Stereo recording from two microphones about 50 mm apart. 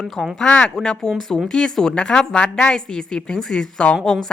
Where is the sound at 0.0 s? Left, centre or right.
Centre.